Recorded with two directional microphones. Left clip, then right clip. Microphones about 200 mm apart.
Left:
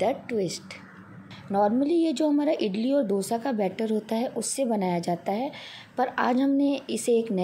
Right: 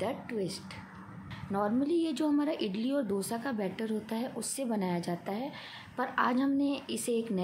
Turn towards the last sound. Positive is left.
turn(degrees=20)  # may be behind; listen again after turning